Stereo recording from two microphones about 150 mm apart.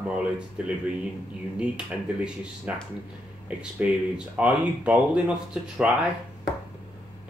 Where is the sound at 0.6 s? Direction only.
10° right (ahead or behind).